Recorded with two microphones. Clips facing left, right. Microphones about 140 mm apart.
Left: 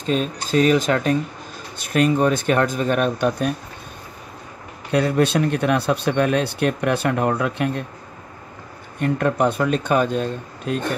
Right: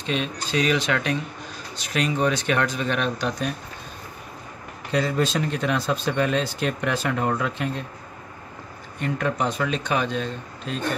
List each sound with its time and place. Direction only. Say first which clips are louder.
0.0 s speech: left 5 dB; 40° left (ahead or behind)
4.9 s speech: left 5 dB; 60° left (ahead or behind)
9.0 s speech: left 6 dB; 55° left (ahead or behind)